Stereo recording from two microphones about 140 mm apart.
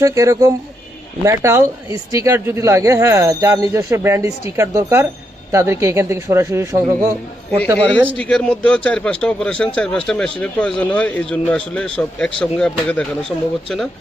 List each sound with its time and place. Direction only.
0.0 s speech: 25° right (ahead or behind)
8.1 s speech: 5° left (ahead or behind)